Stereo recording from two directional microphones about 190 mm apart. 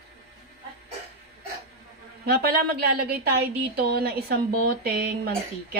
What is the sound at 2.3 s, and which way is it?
A woman's voice, 55° right (ahead or behind).